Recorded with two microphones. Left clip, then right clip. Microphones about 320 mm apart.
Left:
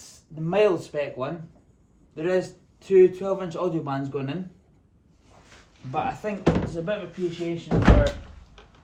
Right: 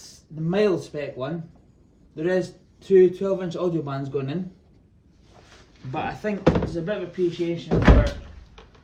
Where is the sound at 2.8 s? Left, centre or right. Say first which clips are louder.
Right 1 dB; left.